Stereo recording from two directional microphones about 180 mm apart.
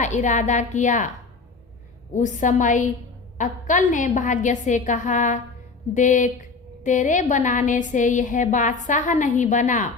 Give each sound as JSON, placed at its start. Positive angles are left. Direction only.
{"t": 0.0, "sound": "a woman's voice", "side_deg": 45}
{"t": 2.1, "sound": "a woman's voice", "side_deg": 45}